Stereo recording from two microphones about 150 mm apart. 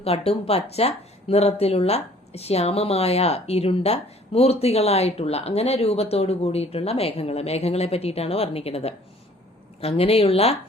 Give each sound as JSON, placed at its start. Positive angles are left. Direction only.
{"t": 0.0, "sound": "speech", "side_deg": 40}